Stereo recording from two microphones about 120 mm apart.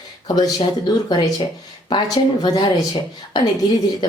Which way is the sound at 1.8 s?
40° left (ahead or behind).